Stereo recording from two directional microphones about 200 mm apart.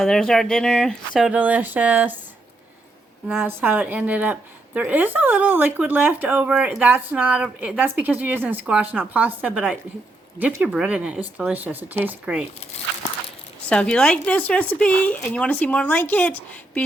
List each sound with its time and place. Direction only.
0.0 s speech: centre (ahead or behind)
3.2 s a woman's voice: 5° right (ahead or behind)
13.7 s speech: 5° left (ahead or behind)